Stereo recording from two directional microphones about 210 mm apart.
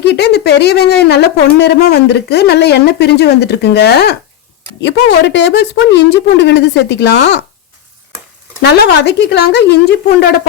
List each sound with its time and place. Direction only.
0.0 s speech: 50° left (ahead or behind)
8.6 s speech: 50° left (ahead or behind)